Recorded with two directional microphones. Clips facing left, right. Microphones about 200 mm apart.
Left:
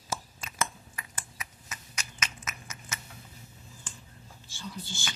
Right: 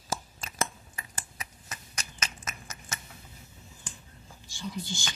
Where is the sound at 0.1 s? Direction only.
30° right (ahead or behind).